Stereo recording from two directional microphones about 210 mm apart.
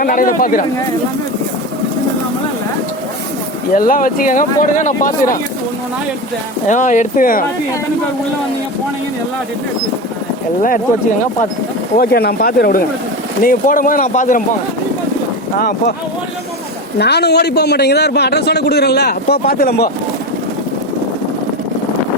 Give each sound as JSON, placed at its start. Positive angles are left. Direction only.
{"t": 0.0, "sound": "speech", "side_deg": 40}
{"t": 3.7, "sound": "speech", "side_deg": 40}
{"t": 6.7, "sound": "speech", "side_deg": 35}
{"t": 11.9, "sound": "a man's voice", "side_deg": 45}
{"t": 17.0, "sound": "a man's voice", "side_deg": 50}